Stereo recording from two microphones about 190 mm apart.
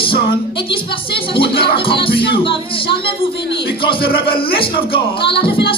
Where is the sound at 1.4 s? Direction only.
55° left (ahead or behind).